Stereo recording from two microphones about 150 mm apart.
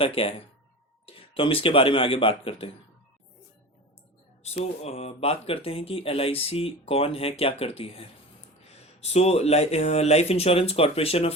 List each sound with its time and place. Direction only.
0.0 s speech: 40° left (ahead or behind)
4.4 s speech: 45° left (ahead or behind)